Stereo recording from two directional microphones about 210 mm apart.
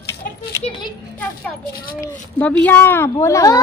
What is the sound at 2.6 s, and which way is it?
Speech, 10° left (ahead or behind).